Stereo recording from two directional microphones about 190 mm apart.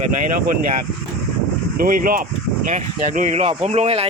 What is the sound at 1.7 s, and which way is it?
Speech, 50° right (ahead or behind).